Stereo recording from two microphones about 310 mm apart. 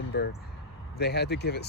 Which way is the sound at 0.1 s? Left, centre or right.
Left.